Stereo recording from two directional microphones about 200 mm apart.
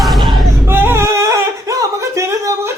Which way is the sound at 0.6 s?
10° right (ahead or behind).